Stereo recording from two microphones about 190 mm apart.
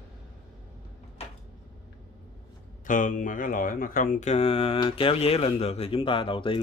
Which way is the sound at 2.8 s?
45° left (ahead or behind).